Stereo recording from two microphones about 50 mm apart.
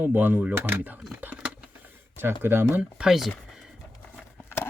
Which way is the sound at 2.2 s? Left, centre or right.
Right.